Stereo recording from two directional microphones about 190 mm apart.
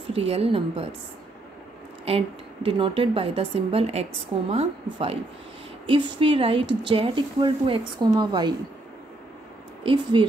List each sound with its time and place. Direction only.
0.1 s a woman's voice: 30° right (ahead or behind)
2.0 s a woman's voice: 30° right (ahead or behind)
9.8 s speech: 25° right (ahead or behind)